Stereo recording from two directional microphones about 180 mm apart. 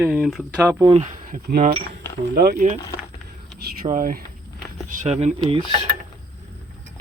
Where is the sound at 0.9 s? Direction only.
40° right (ahead or behind).